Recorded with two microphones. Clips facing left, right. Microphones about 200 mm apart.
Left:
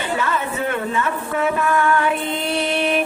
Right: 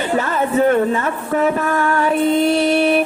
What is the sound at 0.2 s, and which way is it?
Speech, 40° right (ahead or behind).